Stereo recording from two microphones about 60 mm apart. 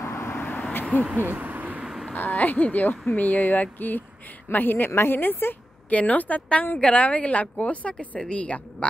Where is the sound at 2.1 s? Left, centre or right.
Left.